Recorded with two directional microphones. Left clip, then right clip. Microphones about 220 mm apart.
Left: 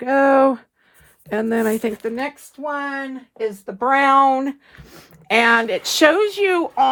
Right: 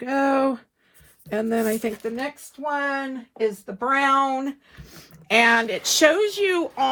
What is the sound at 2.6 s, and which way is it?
Speech, 10° left (ahead or behind).